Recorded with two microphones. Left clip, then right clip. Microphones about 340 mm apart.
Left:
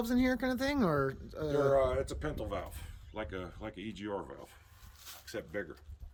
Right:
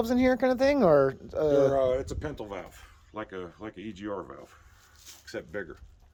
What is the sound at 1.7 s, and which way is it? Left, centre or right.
Speech, right.